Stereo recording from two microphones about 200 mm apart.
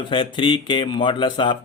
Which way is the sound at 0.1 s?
25° left (ahead or behind).